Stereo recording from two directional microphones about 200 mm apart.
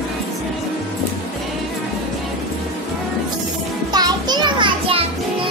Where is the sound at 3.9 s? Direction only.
20° right (ahead or behind).